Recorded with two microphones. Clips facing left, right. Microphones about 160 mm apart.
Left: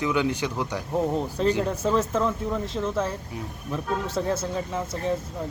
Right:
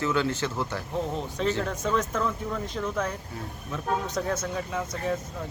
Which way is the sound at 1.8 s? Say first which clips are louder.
Left 3 dB; 30° left (ahead or behind).